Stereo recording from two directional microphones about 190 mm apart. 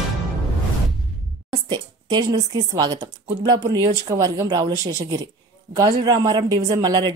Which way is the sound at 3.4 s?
20° right (ahead or behind).